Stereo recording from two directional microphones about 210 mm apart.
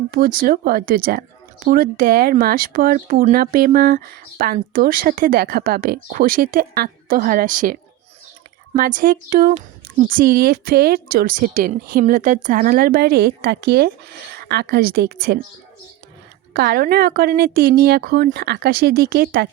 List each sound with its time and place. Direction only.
0.1 s speech: 45° right (ahead or behind)
16.5 s speech: 45° right (ahead or behind)